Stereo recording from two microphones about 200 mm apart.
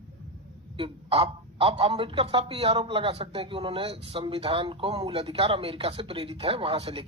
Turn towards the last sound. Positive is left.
turn(degrees=-30)  # may be behind; listen again after turning